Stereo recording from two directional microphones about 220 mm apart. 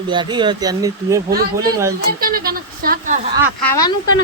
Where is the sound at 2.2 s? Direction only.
40° right (ahead or behind).